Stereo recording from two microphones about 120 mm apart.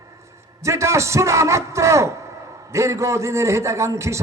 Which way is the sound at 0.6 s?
25° right (ahead or behind).